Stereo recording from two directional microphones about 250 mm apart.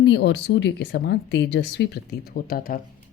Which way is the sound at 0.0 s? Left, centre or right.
Left.